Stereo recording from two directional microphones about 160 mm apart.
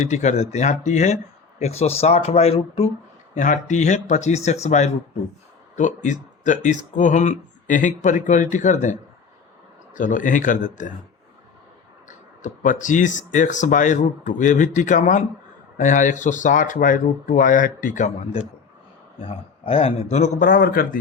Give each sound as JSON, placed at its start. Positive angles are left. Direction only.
{"t": 0.0, "sound": "speech", "side_deg": 45}
{"t": 3.3, "sound": "speech", "side_deg": 50}
{"t": 12.0, "sound": "speech", "side_deg": 50}
{"t": 19.2, "sound": "speech", "side_deg": 35}